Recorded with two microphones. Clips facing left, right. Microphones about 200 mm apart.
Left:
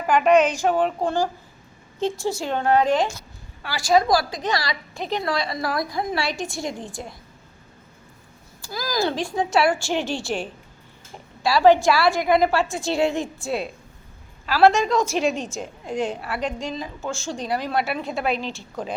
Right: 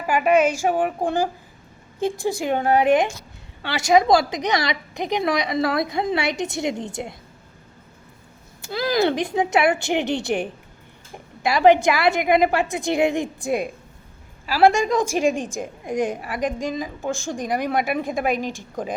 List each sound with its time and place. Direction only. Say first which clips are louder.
0.1 s a woman's voice: left 1 dB; 10° right (ahead or behind)
8.7 s speech: right 6 dB; 65° right (ahead or behind)
9.0 s a woman's voice: right 2 dB; 20° right (ahead or behind)